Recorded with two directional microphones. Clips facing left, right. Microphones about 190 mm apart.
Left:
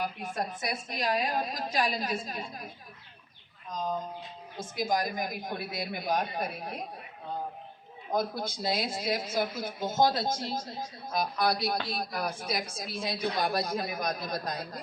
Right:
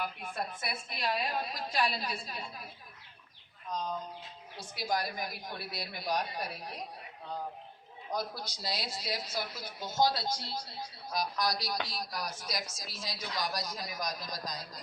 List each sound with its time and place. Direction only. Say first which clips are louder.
0.0 s a woman's voice: left 4 dB; 40° left (ahead or behind)
4.5 s a woman's voice: left 5 dB; 45° left (ahead or behind)
8.1 s a woman's voice: left 7 dB; 50° left (ahead or behind)